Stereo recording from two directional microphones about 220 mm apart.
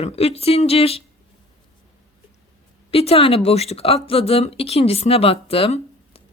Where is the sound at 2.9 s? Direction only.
25° left (ahead or behind).